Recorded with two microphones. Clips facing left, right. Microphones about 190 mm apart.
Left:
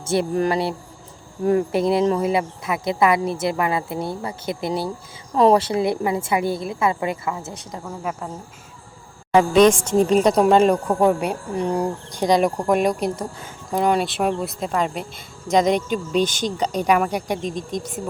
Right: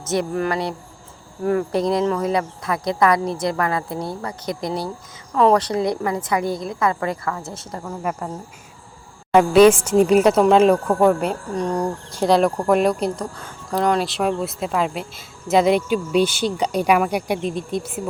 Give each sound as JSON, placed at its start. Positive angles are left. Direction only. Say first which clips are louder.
{"t": 0.0, "sound": "a woman's voice", "louder": "left 1 dB", "side_deg": 30}
{"t": 7.4, "sound": "speech", "louder": "right 2 dB", "side_deg": 0}
{"t": 9.3, "sound": "speech", "louder": "right 2 dB", "side_deg": -5}
{"t": 10.8, "sound": "speech", "louder": "right 2 dB", "side_deg": 15}
{"t": 12.1, "sound": "speech", "louder": "right 2 dB", "side_deg": 0}